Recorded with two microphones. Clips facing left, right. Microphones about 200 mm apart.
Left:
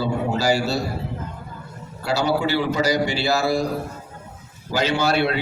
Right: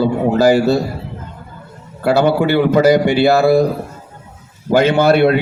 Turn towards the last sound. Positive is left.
turn(degrees=-55)  # may be behind; listen again after turning